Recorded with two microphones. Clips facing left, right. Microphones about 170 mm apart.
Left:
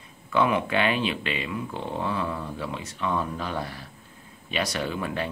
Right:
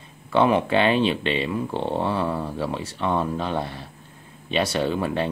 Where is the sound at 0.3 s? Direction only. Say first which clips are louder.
Right 4 dB; 30° right (ahead or behind).